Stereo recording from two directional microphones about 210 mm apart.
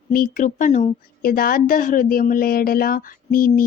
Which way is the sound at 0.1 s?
40° left (ahead or behind).